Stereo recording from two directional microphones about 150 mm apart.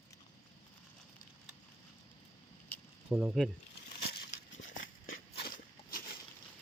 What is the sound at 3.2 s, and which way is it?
Speech, centre (ahead or behind).